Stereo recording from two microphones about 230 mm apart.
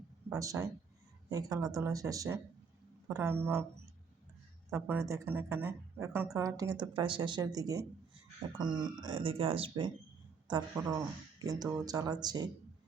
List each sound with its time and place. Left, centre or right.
0.3 s a woman's voice: centre
4.7 s a woman's voice: centre